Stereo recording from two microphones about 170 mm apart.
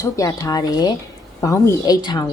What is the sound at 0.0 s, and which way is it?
Speech, 20° left (ahead or behind).